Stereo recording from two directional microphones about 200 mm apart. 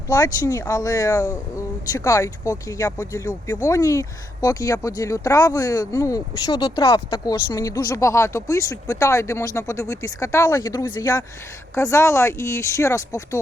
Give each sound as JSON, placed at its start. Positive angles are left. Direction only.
{"t": 0.1, "sound": "speech", "side_deg": 20}